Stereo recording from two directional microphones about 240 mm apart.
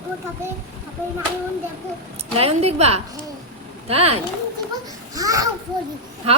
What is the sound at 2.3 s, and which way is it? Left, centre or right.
A woman's voice, right.